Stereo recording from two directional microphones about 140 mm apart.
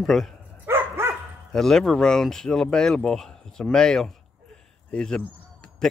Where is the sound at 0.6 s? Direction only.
15° right (ahead or behind).